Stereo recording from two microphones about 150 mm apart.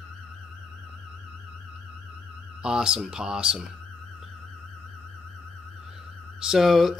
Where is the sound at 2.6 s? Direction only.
5° right (ahead or behind).